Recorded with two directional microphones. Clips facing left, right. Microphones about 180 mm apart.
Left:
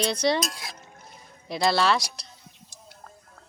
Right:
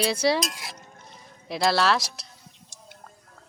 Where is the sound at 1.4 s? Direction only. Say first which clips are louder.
Even; centre (ahead or behind).